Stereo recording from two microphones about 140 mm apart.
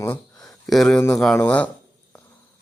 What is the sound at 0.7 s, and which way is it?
Speech, 5° left (ahead or behind).